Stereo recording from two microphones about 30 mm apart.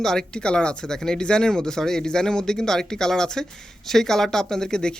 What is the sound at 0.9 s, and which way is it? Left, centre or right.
Speech, centre.